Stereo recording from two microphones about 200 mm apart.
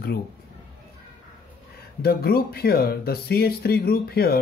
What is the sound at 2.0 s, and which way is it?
Speech, 50° left (ahead or behind).